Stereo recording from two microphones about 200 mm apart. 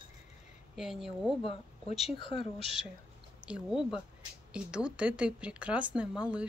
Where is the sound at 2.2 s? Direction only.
25° left (ahead or behind).